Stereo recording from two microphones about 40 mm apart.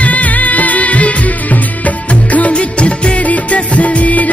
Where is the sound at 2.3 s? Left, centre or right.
Left.